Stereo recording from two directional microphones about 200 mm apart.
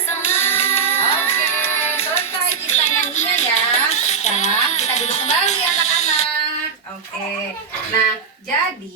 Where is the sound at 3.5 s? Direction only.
30° left (ahead or behind).